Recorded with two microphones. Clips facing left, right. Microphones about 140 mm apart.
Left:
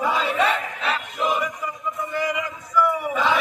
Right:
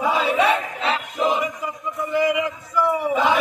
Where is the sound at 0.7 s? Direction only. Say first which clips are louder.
Right 3 dB; 20° right (ahead or behind).